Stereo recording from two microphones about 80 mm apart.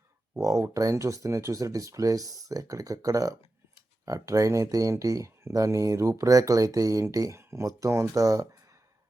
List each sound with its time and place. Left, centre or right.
0.3 s speech: right